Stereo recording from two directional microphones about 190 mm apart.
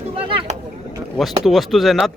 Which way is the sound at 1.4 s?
Centre (ahead or behind).